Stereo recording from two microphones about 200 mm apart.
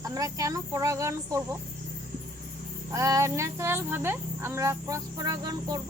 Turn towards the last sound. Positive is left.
turn(degrees=-20)  # may be behind; listen again after turning